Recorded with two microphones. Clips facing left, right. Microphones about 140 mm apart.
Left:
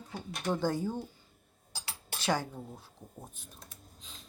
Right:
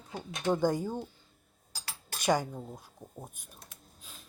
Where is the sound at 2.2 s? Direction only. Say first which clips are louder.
Right 4 dB; 15° right (ahead or behind).